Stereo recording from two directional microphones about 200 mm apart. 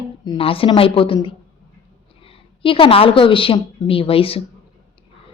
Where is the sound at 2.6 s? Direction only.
25° left (ahead or behind).